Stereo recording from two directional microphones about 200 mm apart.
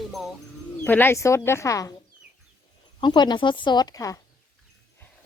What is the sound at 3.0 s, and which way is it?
Speech, 20° left (ahead or behind).